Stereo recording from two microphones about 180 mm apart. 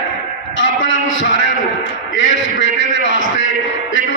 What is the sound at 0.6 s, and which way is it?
A man's voice, 90° left.